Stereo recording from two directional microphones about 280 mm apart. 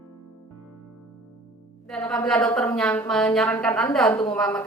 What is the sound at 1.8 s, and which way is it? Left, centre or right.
Speech, centre.